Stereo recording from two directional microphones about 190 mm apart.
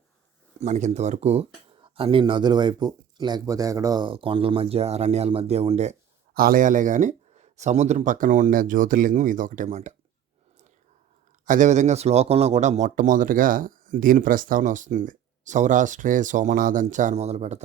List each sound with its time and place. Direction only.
0.6 s speech: 35° right (ahead or behind)
6.3 s speech: 50° right (ahead or behind)
11.4 s speech: 40° right (ahead or behind)